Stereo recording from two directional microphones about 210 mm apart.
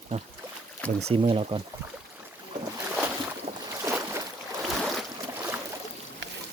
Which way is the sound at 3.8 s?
15° right (ahead or behind).